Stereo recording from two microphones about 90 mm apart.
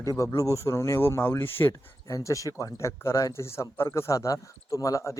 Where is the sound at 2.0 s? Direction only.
35° left (ahead or behind).